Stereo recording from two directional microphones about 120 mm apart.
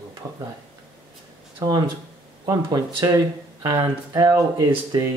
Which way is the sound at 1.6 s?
35° right (ahead or behind).